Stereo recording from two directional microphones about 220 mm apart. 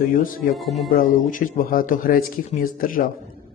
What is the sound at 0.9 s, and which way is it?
Speech, 40° left (ahead or behind).